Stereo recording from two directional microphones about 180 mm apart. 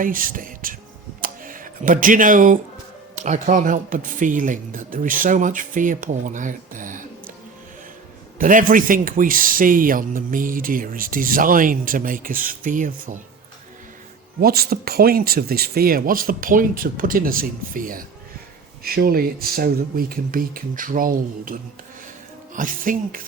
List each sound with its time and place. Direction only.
0.0 s speech: 50° right (ahead or behind)
1.2 s a sound: 50° right (ahead or behind)
3.2 s speech: 40° right (ahead or behind)
8.4 s speech: 50° right (ahead or behind)
14.4 s speech: 60° right (ahead or behind)
22.5 s speech: 50° right (ahead or behind)